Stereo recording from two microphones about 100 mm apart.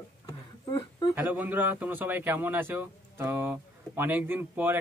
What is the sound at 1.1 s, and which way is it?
A man's voice, 15° right (ahead or behind).